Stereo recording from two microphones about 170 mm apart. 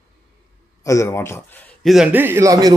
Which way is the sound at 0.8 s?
20° left (ahead or behind).